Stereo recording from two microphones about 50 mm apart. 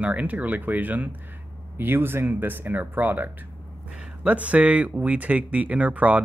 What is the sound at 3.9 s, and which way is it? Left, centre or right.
Speech, right.